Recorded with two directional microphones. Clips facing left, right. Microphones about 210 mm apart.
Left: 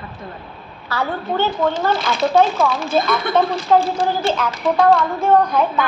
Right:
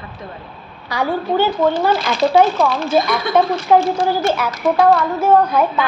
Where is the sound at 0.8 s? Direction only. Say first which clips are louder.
Right 3 dB; 10° right (ahead or behind).